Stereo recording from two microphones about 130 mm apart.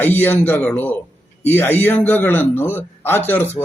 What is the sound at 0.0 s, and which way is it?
A man's voice, 15° left (ahead or behind).